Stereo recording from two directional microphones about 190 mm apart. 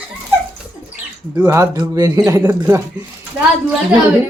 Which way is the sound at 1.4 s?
20° right (ahead or behind).